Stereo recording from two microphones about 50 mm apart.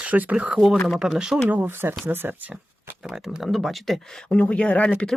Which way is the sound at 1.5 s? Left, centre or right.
Right.